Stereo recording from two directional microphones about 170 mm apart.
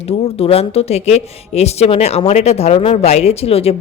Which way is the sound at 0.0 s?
35° left (ahead or behind).